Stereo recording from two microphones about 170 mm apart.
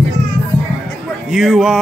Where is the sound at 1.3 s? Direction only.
Centre (ahead or behind).